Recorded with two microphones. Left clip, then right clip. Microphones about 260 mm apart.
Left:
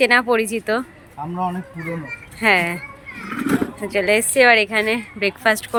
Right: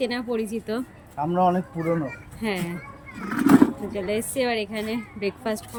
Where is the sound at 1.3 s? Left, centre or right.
Centre.